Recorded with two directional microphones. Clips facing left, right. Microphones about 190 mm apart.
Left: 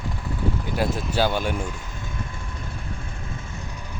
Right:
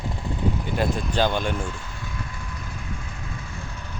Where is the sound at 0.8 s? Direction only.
5° left (ahead or behind).